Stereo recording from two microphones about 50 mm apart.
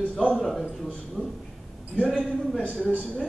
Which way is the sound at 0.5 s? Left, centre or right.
Centre.